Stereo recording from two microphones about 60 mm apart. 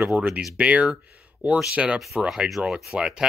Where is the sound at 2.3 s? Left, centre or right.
Centre.